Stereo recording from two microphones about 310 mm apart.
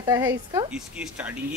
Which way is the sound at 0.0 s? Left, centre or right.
Centre.